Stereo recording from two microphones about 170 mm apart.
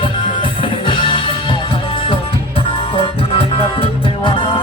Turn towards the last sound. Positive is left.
turn(degrees=30)  # may be behind; listen again after turning